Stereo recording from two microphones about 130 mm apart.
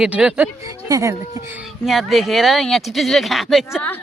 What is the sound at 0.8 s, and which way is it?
Speech, 25° right (ahead or behind).